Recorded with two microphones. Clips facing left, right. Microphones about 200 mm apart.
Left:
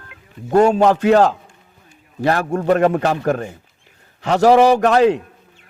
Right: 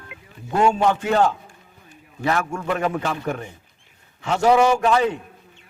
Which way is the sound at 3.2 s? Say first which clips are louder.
Left 8 dB; 65° left (ahead or behind).